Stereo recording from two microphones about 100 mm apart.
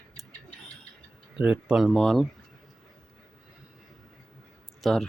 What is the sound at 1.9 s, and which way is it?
Speech, 5° left (ahead or behind).